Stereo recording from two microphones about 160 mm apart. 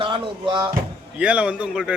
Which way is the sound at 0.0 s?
30° right (ahead or behind).